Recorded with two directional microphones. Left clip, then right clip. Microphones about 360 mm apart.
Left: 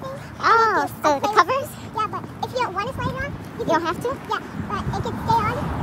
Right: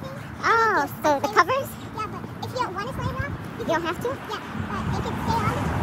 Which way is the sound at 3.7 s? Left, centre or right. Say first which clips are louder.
Left 3 dB; centre.